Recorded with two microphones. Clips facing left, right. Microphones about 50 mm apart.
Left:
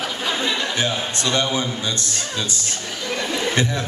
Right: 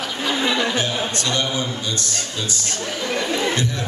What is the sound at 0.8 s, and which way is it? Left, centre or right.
A man's voice, left.